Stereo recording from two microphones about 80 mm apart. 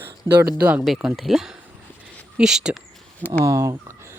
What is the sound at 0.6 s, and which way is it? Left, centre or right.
Speech, centre.